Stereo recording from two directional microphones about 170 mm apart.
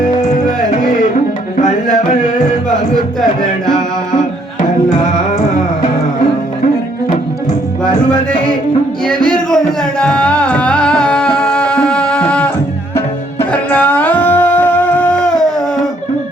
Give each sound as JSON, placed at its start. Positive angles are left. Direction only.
{"t": 0.4, "sound": "music", "side_deg": 50}
{"t": 9.0, "sound": "music", "side_deg": 5}
{"t": 13.5, "sound": "music", "side_deg": 5}